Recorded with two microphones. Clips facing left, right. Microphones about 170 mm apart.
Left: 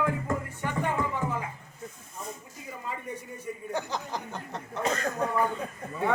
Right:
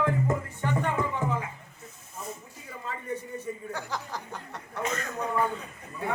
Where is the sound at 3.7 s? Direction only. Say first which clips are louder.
Left 3 dB; 20° left (ahead or behind).